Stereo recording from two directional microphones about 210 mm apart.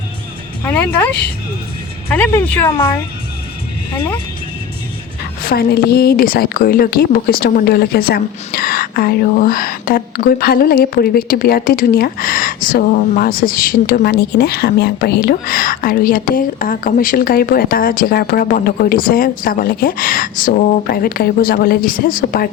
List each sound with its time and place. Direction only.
0.6 s speech: 10° left (ahead or behind)
5.4 s speech: 45° left (ahead or behind)